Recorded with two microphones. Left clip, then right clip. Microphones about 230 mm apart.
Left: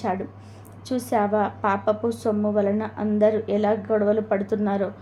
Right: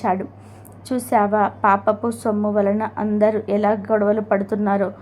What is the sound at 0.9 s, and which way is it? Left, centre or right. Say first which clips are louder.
A woman's voice: right 5 dB; centre.